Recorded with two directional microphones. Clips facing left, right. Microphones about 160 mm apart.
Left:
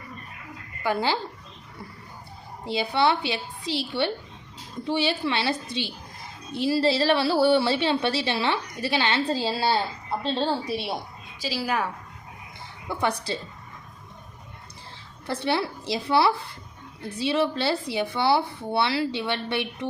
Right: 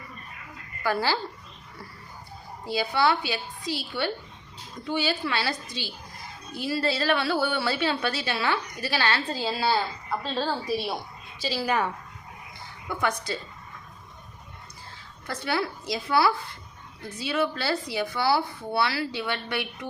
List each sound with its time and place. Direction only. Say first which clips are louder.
0.8 s a woman's voice: left 1 dB; 20° left (ahead or behind)
2.9 s a woman's voice: left 2 dB; 25° left (ahead or behind)
11.3 s a woman's voice: right 1 dB; 5° left (ahead or behind)
12.9 s a woman's voice: left 2 dB; 30° left (ahead or behind)
15.3 s a woman's voice: left 3 dB; 30° left (ahead or behind)